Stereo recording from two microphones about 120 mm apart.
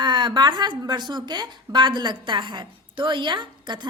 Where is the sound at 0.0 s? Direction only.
40° right (ahead or behind).